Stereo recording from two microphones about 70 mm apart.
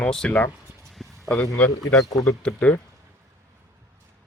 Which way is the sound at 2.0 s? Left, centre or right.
Left.